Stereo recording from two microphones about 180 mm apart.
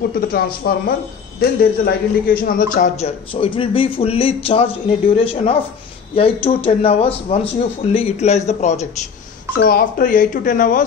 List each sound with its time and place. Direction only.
0.3 s a man's voice: 55° left (ahead or behind)
3.0 s speech: 30° left (ahead or behind)
9.6 s speech: 55° left (ahead or behind)